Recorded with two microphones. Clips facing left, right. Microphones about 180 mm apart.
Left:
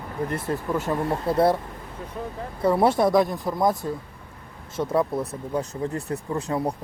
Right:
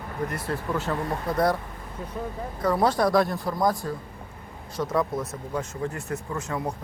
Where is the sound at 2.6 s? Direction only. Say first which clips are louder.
Left 3 dB; 25° left (ahead or behind).